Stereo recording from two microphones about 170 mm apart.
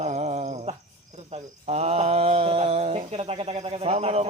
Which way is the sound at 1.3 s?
40° right (ahead or behind).